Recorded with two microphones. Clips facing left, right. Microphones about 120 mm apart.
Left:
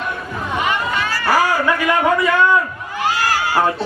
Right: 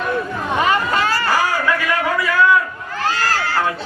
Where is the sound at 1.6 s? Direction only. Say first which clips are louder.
Left 3 dB; 25° left (ahead or behind).